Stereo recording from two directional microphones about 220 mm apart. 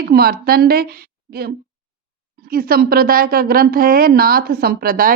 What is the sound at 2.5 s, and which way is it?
A woman's voice, 40° right (ahead or behind).